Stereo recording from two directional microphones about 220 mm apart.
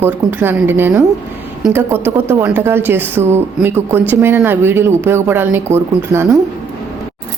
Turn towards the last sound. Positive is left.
turn(degrees=-10)  # may be behind; listen again after turning